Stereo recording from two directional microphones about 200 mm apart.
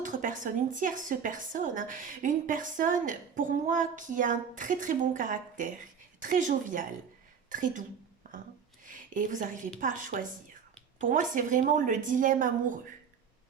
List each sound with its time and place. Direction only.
0.0 s speech: 40° right (ahead or behind)
8.2 s a sound: 40° right (ahead or behind)
8.9 s speech: 40° right (ahead or behind)